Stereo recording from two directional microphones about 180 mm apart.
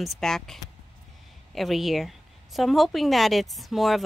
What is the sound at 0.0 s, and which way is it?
A woman's voice, centre (ahead or behind).